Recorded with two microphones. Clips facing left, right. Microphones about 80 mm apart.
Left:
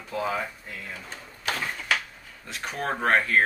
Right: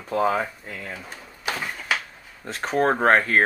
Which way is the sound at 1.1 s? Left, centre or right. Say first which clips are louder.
Even; centre.